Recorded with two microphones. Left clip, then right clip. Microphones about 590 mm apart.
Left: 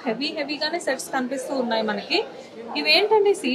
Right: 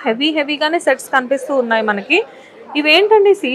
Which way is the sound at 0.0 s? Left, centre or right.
Right.